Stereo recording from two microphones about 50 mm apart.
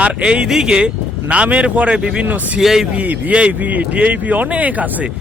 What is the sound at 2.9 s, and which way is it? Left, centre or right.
Speech, right.